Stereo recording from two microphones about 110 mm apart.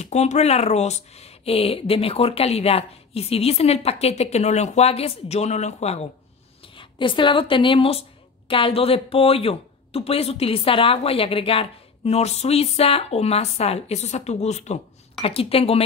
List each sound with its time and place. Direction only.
0.0 s speech: 90° left
6.7 s speech: 50° left (ahead or behind); by 14.8 s 90° left
15.2 s speech: 60° left (ahead or behind)